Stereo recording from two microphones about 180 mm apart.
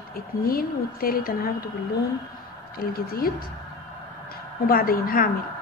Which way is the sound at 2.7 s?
55° left (ahead or behind).